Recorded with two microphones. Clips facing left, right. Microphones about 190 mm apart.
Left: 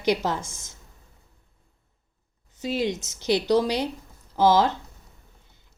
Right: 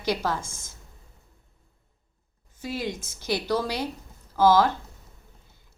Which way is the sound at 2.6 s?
20° left (ahead or behind).